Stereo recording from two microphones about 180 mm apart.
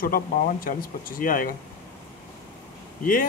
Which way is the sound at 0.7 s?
50° left (ahead or behind).